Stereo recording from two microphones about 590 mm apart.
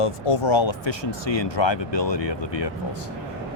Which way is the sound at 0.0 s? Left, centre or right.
Left.